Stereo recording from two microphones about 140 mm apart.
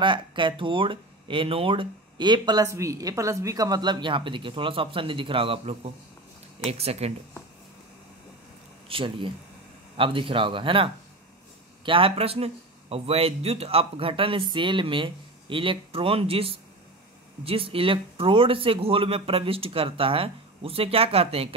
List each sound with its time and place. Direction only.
0.0 s speech: 35° right (ahead or behind)
8.8 s speech: 35° right (ahead or behind)